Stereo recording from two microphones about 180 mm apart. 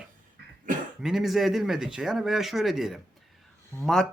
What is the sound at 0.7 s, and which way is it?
Throat clearing, 45° right (ahead or behind).